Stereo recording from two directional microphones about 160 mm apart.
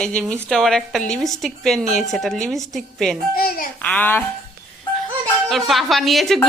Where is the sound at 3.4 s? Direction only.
65° left (ahead or behind).